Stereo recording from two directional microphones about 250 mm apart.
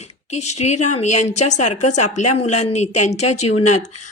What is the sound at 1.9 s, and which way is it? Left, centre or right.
Speech, left.